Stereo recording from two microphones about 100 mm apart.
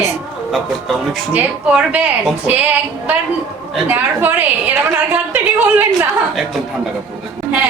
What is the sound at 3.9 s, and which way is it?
A woman's voice, 20° right (ahead or behind).